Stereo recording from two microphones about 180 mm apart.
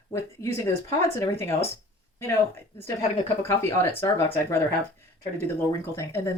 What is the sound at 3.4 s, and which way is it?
Speech, 15° left (ahead or behind).